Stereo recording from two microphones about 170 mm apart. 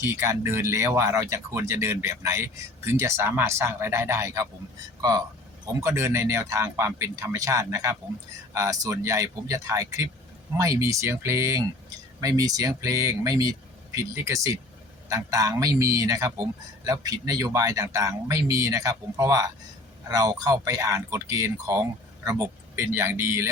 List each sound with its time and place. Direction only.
0.0 s speech: 15° right (ahead or behind)
5.6 s a man's voice: 15° right (ahead or behind)